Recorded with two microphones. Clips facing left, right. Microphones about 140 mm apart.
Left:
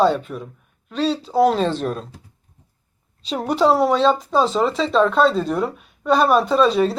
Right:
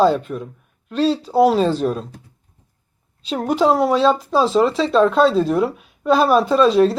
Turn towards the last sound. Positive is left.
turn(degrees=0)  # may be behind; listen again after turning